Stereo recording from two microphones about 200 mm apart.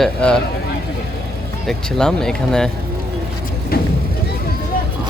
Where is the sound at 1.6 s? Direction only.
5° left (ahead or behind).